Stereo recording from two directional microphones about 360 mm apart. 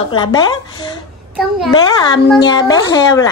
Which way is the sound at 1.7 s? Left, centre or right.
Centre.